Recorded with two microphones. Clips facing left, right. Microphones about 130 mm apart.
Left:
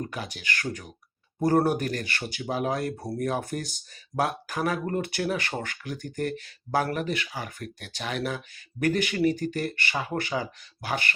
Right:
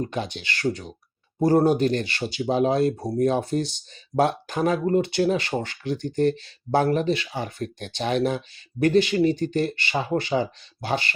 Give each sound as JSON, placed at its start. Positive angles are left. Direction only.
{"t": 0.0, "sound": "speech", "side_deg": -30}